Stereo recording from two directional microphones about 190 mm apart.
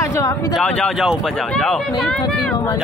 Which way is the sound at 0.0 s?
15° left (ahead or behind).